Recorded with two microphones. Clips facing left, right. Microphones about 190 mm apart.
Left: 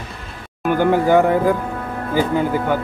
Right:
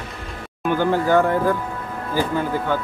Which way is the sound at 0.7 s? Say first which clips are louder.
Left 3 dB; 15° left (ahead or behind).